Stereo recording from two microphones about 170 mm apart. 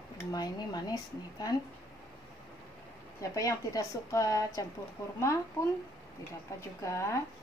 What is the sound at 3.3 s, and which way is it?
A woman's voice, 20° left (ahead or behind).